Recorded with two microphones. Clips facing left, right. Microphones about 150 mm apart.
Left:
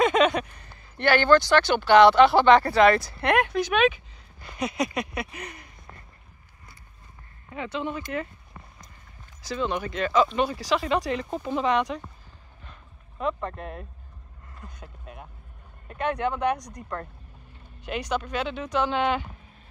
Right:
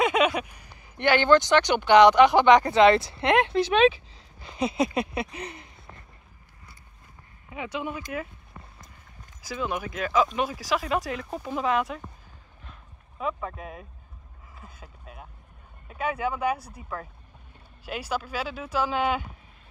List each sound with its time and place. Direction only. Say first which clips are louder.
0.0 s speech: left 2 dB; 10° right (ahead or behind); by 4.0 s 30° right (ahead or behind)
4.5 s a sound: right 2 dB; 25° right (ahead or behind)
7.4 s speech: left 2 dB; 10° right (ahead or behind)
9.5 s speech: left 2 dB; 5° right (ahead or behind)
13.2 s speech: left 2 dB; 5° right (ahead or behind)
14.5 s a sound: left 3 dB; 5° right (ahead or behind)
15.9 s speech: left 2 dB; 5° right (ahead or behind)